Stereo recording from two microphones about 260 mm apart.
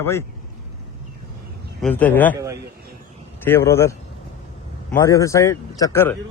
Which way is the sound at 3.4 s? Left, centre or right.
Centre.